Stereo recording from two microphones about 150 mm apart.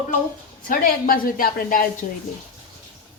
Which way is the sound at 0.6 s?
75° left (ahead or behind).